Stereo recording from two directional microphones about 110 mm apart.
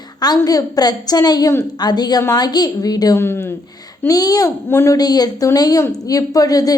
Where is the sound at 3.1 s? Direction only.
20° left (ahead or behind).